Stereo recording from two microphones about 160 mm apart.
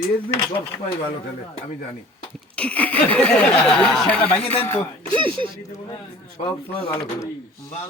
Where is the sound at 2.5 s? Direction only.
10° left (ahead or behind).